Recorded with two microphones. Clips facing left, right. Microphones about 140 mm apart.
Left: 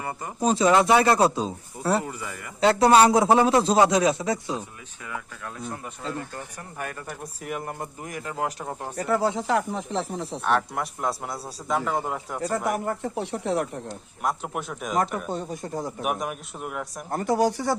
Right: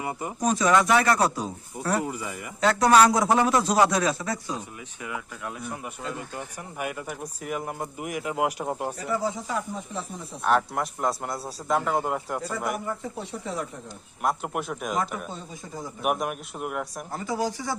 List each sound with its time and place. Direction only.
0.0 s speech: 10° right (ahead or behind)
0.3 s a man's voice: 25° left (ahead or behind)
2.0 s speech: 20° right (ahead or behind)
2.6 s a man's voice: 25° left (ahead or behind)
6.1 s speech: 10° right (ahead or behind)
9.0 s speech: 65° left (ahead or behind)
10.4 s a man's voice: centre (ahead or behind)
12.7 s speech: 65° left (ahead or behind)
14.2 s a man's voice: 5° right (ahead or behind)
15.3 s speech: 65° left (ahead or behind)
16.0 s a man's voice: centre (ahead or behind)
17.1 s speech: 60° left (ahead or behind)